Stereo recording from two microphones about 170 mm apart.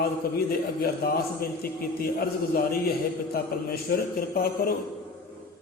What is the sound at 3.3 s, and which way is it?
A man's voice, 65° left (ahead or behind).